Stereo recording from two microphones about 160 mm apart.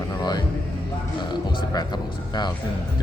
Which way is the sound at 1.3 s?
25° left (ahead or behind).